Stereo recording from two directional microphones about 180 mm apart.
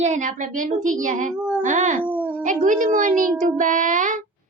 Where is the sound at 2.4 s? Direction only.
45° right (ahead or behind).